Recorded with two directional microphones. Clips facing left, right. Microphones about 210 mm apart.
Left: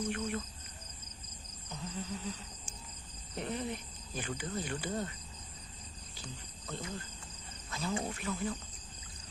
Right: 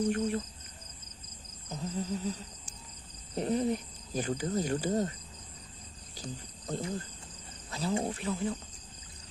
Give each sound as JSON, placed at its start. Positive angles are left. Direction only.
{"t": 0.1, "sound": "speech", "side_deg": -30}
{"t": 1.7, "sound": "a sound", "side_deg": -40}
{"t": 3.3, "sound": "speech", "side_deg": -35}
{"t": 6.1, "sound": "speech", "side_deg": -40}